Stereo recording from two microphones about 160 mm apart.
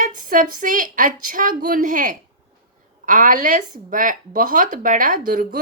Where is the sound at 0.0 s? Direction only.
55° right (ahead or behind).